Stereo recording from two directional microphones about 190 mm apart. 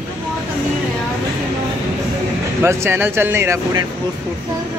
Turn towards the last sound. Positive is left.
turn(degrees=-15)  # may be behind; listen again after turning